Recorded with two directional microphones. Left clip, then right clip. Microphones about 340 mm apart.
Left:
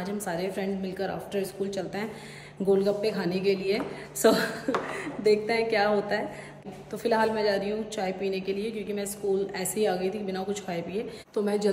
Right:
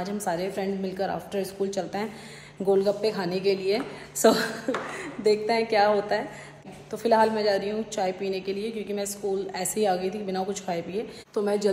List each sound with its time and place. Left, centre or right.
0.0 s a woman's voice: centre